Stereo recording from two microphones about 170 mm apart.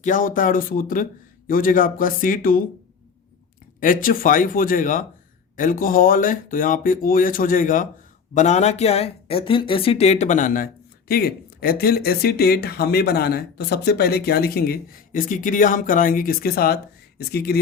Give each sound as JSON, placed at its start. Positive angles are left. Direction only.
{"t": 0.0, "sound": "speech", "side_deg": 50}
{"t": 3.8, "sound": "speech", "side_deg": 55}
{"t": 11.1, "sound": "speech", "side_deg": 60}